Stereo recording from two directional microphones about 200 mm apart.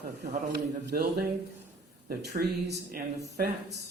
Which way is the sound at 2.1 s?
50° right (ahead or behind).